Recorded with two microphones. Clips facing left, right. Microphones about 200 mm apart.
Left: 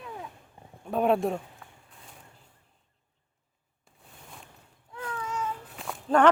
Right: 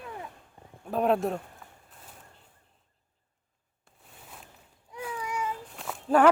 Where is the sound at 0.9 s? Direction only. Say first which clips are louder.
Left 1 dB; centre (ahead or behind).